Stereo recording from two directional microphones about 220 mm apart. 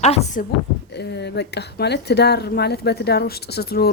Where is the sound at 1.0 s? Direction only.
50° left (ahead or behind).